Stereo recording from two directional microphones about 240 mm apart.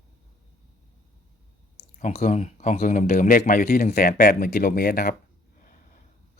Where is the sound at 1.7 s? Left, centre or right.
Left.